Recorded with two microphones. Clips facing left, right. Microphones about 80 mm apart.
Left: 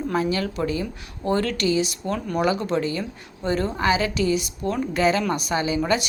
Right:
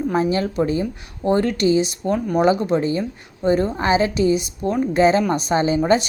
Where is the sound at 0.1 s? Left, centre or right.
Right.